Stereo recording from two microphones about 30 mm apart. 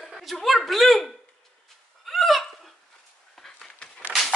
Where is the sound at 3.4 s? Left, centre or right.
Left.